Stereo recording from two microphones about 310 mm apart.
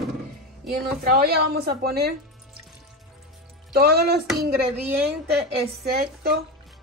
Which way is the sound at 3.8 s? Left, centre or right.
Right.